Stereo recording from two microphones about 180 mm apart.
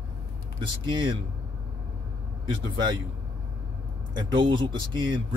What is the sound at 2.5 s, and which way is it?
Speech, 25° right (ahead or behind).